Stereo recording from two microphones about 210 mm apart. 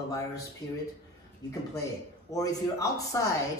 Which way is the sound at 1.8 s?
15° left (ahead or behind).